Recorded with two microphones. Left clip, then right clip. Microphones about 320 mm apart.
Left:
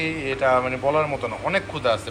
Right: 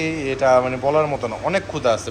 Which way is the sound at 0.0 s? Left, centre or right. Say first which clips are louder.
Right 3 dB; centre.